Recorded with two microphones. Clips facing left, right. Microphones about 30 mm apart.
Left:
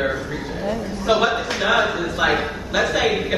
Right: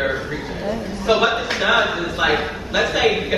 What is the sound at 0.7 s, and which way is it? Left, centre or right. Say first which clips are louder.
A man's voice: right 1 dB; centre.